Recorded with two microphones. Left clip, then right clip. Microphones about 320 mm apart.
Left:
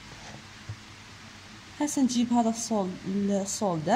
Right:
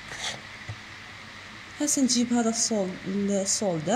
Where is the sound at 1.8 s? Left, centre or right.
Left.